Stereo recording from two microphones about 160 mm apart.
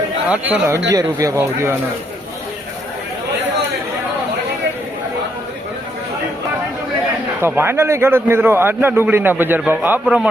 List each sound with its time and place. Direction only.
0.3 s a man's voice: 10° right (ahead or behind)
0.9 s speech: 20° right (ahead or behind)
7.4 s a man's voice: 15° right (ahead or behind)